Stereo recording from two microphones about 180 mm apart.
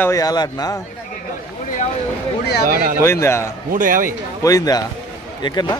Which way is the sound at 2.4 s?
65° left (ahead or behind).